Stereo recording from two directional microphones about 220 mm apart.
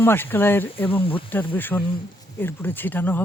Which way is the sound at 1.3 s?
10° left (ahead or behind).